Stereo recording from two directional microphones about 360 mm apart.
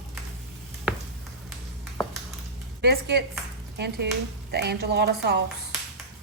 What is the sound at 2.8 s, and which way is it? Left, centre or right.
A woman's voice, right.